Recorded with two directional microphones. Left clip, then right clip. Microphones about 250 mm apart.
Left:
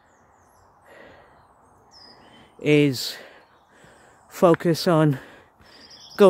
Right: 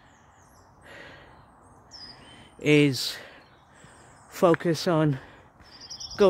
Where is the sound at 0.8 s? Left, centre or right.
Centre.